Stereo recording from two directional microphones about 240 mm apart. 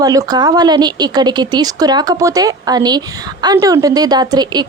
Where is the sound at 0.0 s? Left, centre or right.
Centre.